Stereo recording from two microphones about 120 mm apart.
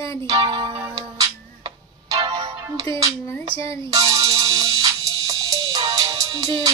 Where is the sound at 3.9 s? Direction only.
30° right (ahead or behind).